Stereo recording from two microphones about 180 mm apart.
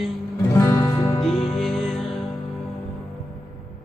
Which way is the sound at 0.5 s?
20° left (ahead or behind).